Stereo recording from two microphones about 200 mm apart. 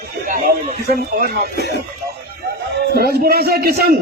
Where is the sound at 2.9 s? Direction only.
50° right (ahead or behind).